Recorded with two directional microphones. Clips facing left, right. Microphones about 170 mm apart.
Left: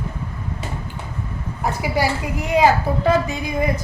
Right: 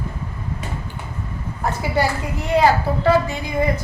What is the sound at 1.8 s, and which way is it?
A woman's voice, 10° left (ahead or behind).